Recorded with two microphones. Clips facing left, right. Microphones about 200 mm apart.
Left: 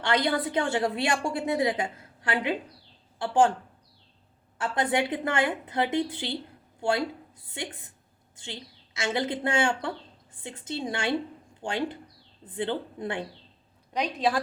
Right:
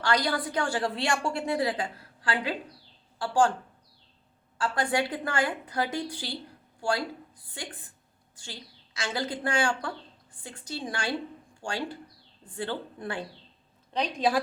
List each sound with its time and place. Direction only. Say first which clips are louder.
0.0 s a woman's voice: left 2 dB; 25° left (ahead or behind)
4.5 s a woman's voice: left 1 dB; 20° left (ahead or behind)
8.4 s a woman's voice: left 4 dB; 25° left (ahead or behind)
14.2 s a woman's voice: right 1 dB; centre (ahead or behind)